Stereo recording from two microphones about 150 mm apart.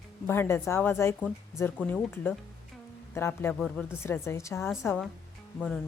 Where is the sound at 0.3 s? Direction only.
15° left (ahead or behind).